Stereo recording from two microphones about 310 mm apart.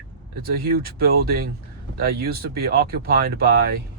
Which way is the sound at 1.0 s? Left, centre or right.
Right.